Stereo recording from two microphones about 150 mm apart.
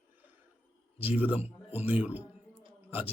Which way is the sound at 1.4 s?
45° left (ahead or behind).